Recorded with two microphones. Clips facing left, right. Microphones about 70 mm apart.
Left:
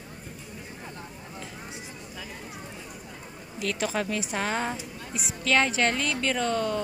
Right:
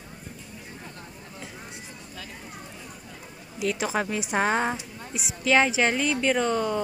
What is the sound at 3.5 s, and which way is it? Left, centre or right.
Speech, centre.